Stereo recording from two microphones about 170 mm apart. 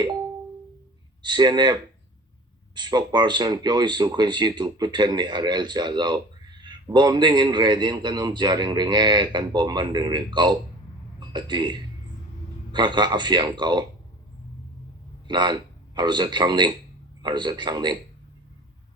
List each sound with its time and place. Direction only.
1.2 s speech: 25° right (ahead or behind)
15.3 s a man's voice: 25° right (ahead or behind)